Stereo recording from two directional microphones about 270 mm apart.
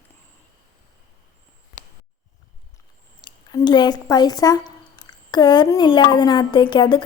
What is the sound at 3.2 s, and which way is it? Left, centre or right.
A woman's voice, centre.